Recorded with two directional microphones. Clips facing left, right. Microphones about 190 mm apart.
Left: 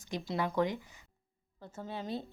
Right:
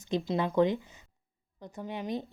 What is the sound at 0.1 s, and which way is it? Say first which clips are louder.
A woman's voice: right 5 dB; 20° right (ahead or behind).